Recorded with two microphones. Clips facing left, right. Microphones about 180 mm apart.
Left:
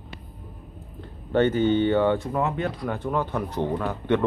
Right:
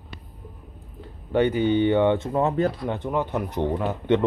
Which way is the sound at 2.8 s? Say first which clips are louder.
Right 1 dB; 20° right (ahead or behind).